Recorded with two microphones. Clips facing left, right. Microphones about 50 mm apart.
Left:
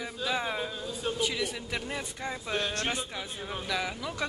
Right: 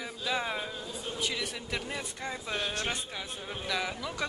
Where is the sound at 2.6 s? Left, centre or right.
Left.